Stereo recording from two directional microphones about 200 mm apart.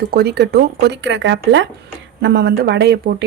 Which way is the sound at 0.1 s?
50° right (ahead or behind).